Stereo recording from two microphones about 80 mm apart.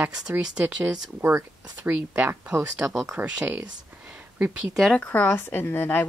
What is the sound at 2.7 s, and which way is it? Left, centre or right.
Speech, centre.